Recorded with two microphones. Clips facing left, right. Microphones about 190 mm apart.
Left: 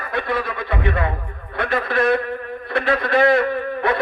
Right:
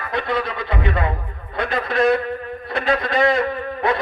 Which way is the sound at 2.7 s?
55° left (ahead or behind).